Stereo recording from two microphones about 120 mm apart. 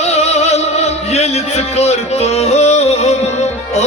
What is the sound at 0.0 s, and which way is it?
Music, 65° left (ahead or behind).